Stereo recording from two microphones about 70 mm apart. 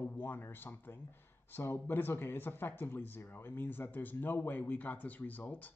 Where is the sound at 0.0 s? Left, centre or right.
Left.